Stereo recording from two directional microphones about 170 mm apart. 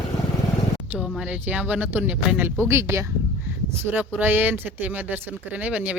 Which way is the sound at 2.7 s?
15° right (ahead or behind).